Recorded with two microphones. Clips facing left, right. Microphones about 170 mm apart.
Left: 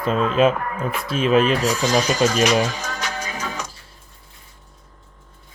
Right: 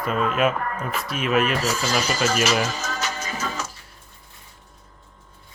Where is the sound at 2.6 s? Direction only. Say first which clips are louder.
Left 1 dB; 15° left (ahead or behind).